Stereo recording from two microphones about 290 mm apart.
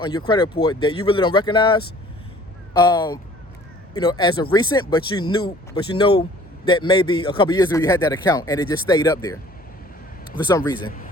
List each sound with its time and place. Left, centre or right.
0.3 s speech: centre